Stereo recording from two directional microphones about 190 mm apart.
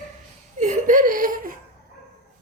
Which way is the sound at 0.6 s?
40° right (ahead or behind).